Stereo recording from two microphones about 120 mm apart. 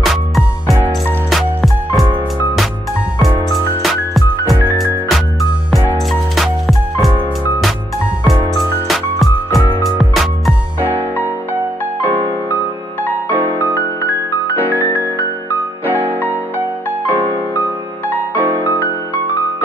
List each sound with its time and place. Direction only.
1.3 s music: centre (ahead or behind)
3.4 s music: centre (ahead or behind)
8.5 s music: centre (ahead or behind)
13.4 s music: 15° right (ahead or behind)
15.8 s music: 15° right (ahead or behind)
17.0 s music: 15° left (ahead or behind)
18.4 s music: 15° right (ahead or behind)